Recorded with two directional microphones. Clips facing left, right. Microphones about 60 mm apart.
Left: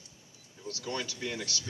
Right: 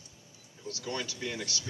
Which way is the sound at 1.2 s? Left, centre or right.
Right.